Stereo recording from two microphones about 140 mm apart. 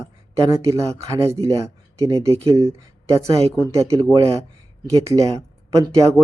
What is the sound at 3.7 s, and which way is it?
Speech, 20° right (ahead or behind).